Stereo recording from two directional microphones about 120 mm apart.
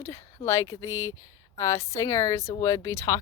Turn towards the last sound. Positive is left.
turn(degrees=25)  # may be behind; listen again after turning